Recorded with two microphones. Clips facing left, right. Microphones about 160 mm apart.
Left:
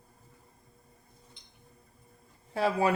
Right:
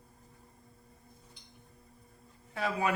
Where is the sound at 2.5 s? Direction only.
30° left (ahead or behind).